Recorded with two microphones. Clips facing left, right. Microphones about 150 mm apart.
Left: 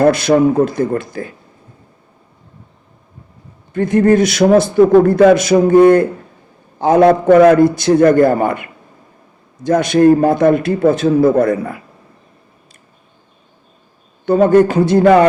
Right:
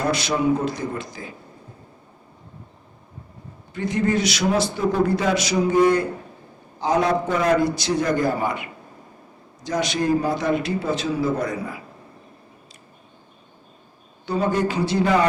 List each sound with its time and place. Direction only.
0.0 s a man's voice: 55° left (ahead or behind)
3.8 s a man's voice: 50° left (ahead or behind)
14.3 s a man's voice: 55° left (ahead or behind)